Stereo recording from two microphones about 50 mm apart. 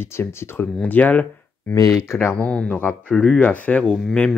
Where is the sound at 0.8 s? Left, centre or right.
Left.